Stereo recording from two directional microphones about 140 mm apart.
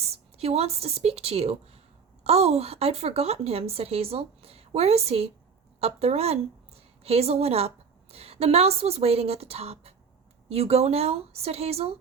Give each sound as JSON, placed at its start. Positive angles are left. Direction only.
{"t": 0.0, "sound": "a woman's voice", "side_deg": -45}